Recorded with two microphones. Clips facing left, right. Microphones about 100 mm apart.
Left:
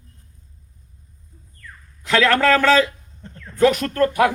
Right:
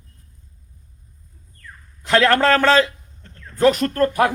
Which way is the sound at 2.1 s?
35° right (ahead or behind).